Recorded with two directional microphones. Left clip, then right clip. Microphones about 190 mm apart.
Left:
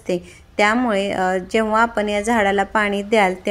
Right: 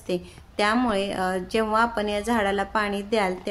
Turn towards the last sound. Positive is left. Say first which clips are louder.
# left 8 dB
turn(degrees=30)  # may be behind; listen again after turning